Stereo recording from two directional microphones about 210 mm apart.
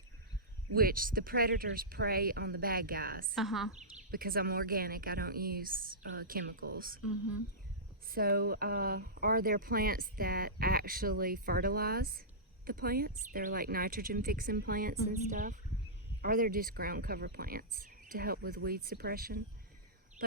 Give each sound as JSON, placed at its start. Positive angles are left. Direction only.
{"t": 0.8, "sound": "speech", "side_deg": -45}
{"t": 3.3, "sound": "a woman's voice", "side_deg": 0}
{"t": 4.1, "sound": "speech", "side_deg": -45}
{"t": 8.0, "sound": "speech", "side_deg": -45}
{"t": 20.2, "sound": "a sound", "side_deg": -45}